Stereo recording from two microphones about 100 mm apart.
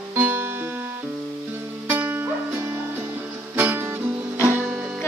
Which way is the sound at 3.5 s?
25° right (ahead or behind).